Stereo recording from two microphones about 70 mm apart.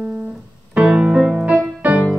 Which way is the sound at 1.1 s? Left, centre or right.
Centre.